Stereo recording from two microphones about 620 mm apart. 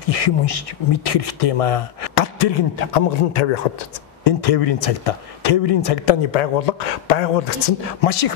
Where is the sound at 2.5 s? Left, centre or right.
Left.